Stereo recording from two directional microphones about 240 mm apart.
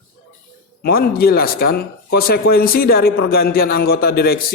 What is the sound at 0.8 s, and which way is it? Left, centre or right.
Speech, left.